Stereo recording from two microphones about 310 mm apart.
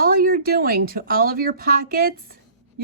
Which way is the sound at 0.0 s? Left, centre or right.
Right.